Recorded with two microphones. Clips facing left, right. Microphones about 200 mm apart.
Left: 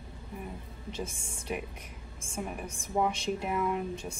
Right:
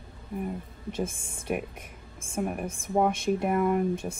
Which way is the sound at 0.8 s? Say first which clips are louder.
Right 6 dB; 55° right (ahead or behind).